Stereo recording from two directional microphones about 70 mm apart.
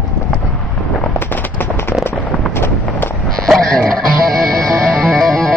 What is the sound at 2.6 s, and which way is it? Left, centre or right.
Run, left.